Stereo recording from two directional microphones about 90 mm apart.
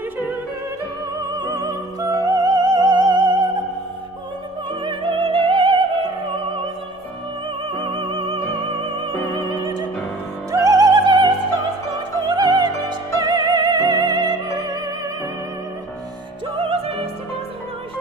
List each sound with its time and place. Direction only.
1.2 s opera: 45° right (ahead or behind)
4.8 s music: 70° right (ahead or behind); by 5.8 s 90° right
7.7 s music: 65° right (ahead or behind)
9.1 s music: 40° left (ahead or behind)
10.5 s music: 40° right (ahead or behind)
13.2 s opera: 50° right (ahead or behind)
16.6 s music: 90° right